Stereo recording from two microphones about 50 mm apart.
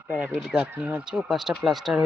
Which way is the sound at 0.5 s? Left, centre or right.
Centre.